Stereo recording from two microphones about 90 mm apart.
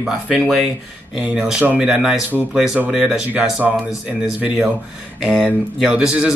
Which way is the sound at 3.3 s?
15° right (ahead or behind).